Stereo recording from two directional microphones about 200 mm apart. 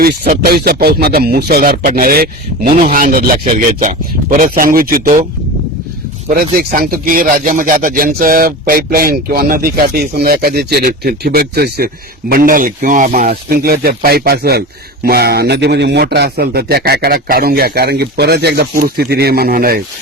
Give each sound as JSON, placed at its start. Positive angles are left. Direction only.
{"t": 0.0, "sound": "speech", "side_deg": -50}
{"t": 4.4, "sound": "speech", "side_deg": -45}
{"t": 6.2, "sound": "speech", "side_deg": -45}